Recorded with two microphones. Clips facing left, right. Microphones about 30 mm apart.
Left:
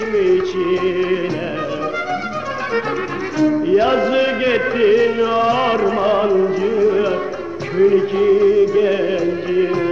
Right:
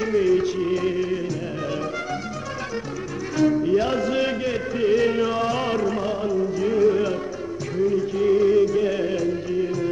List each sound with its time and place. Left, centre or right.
0.1 s music: left
3.6 s music: left
4.4 s music: left
4.9 s music: centre
6.1 s music: left
6.6 s music: centre
7.7 s music: left
8.3 s music: centre
8.8 s music: left